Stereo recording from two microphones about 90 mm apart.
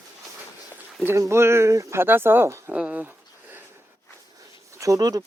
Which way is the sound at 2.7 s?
15° right (ahead or behind).